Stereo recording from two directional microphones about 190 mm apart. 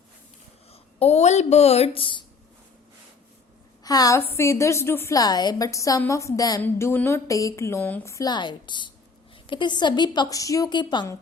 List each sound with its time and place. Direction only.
0.7 s speech: 30° left (ahead or behind)
3.8 s a woman's voice: 20° left (ahead or behind)